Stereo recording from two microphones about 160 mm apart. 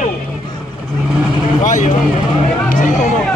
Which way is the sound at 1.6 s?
50° left (ahead or behind).